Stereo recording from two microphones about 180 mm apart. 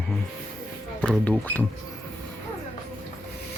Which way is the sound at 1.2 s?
10° left (ahead or behind).